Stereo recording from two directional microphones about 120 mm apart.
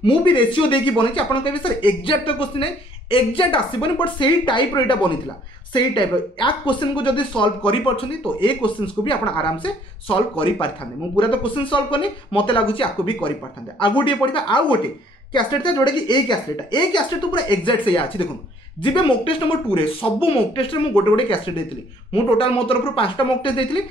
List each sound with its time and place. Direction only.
0.0 s speech: 45° left (ahead or behind)